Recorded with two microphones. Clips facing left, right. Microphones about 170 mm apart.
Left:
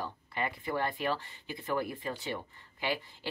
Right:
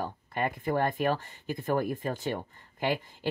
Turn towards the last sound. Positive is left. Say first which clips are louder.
# right 5 dB
turn(degrees=-45)  # may be behind; listen again after turning